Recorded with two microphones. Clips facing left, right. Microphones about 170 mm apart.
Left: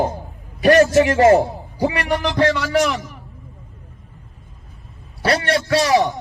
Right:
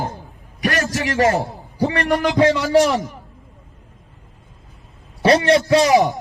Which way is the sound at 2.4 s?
20° right (ahead or behind).